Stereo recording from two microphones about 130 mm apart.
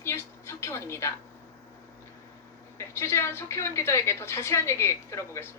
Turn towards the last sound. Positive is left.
turn(degrees=20)  # may be behind; listen again after turning